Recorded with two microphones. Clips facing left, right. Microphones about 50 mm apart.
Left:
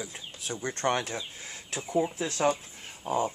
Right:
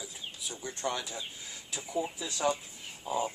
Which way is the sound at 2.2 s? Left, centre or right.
Left.